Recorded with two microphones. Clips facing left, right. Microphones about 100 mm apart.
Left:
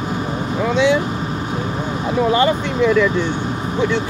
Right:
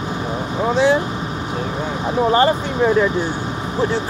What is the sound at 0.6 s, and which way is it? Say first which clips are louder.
Speech: even; 35° right (ahead or behind).